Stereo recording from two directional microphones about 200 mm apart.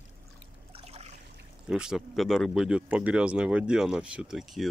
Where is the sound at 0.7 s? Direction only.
30° right (ahead or behind).